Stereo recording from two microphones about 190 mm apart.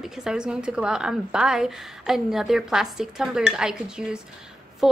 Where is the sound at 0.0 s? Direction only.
5° right (ahead or behind).